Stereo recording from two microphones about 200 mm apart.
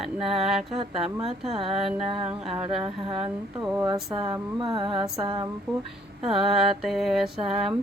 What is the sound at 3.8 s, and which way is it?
Speech, 20° right (ahead or behind).